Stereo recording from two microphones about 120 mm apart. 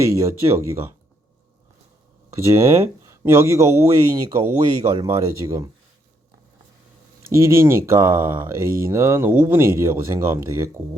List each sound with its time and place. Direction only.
0.0 s speech: 25° right (ahead or behind)
2.3 s speech: 25° right (ahead or behind)
7.3 s speech: 25° right (ahead or behind)